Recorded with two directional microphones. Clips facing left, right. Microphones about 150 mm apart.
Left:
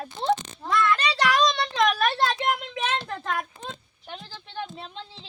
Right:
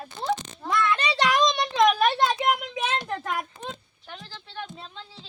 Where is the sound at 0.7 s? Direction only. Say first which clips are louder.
Left 1 dB; 20° right (ahead or behind).